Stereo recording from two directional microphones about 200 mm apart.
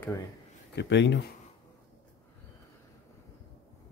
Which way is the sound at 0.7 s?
60° left (ahead or behind).